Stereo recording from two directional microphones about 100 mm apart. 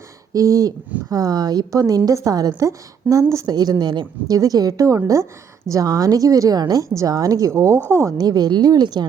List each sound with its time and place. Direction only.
0.3 s a woman's voice: 35° right (ahead or behind)
3.4 s a woman's voice: 45° right (ahead or behind)